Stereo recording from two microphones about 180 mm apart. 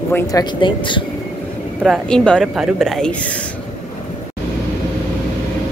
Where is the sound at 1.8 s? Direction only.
5° left (ahead or behind).